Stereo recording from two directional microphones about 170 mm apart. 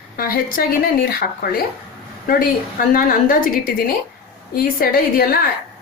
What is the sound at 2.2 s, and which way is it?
A woman's voice, 55° left (ahead or behind).